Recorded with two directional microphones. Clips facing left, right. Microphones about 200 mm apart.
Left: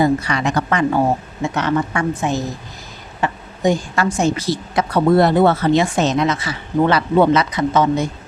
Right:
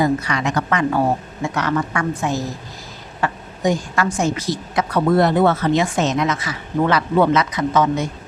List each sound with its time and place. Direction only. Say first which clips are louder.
0.0 s a woman's voice: left 2 dB; 30° left (ahead or behind)